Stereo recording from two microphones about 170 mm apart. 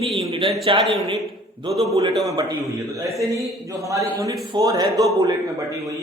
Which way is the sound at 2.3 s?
25° right (ahead or behind).